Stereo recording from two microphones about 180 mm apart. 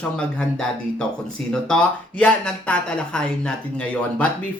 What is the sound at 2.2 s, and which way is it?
Speech, 5° left (ahead or behind).